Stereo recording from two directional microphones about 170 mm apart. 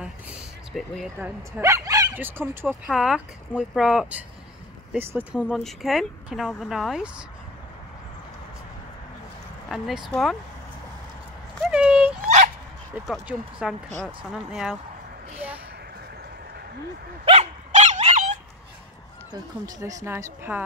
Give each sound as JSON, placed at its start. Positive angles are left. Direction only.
{"t": 0.3, "sound": "a sound", "side_deg": 0}
{"t": 1.2, "sound": "speech", "side_deg": -20}
{"t": 9.7, "sound": "speech", "side_deg": 0}
{"t": 11.6, "sound": "a sound", "side_deg": -5}
{"t": 12.9, "sound": "speech", "side_deg": -5}
{"t": 17.2, "sound": "dog", "side_deg": -35}
{"t": 19.3, "sound": "speech", "side_deg": -20}